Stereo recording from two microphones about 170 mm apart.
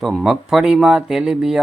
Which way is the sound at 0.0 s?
Centre (ahead or behind).